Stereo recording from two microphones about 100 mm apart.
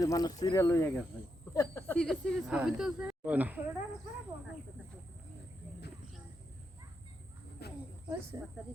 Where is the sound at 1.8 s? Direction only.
10° left (ahead or behind).